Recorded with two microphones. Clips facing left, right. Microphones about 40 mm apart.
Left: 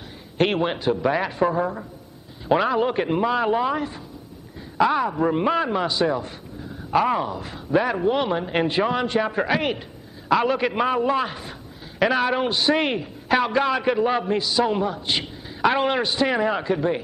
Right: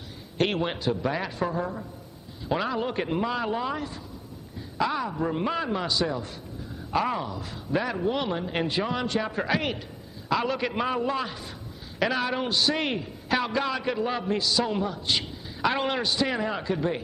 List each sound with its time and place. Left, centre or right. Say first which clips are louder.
0.4 s a man's voice: left 5 dB; centre